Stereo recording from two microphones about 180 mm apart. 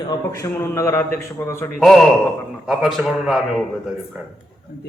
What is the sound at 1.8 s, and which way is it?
A man's voice, centre (ahead or behind).